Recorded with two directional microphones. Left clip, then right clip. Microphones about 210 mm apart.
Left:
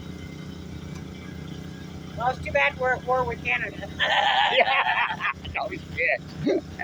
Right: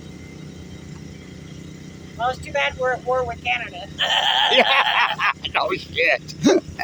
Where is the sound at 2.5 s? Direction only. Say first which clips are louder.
Left 1 dB; 55° right (ahead or behind).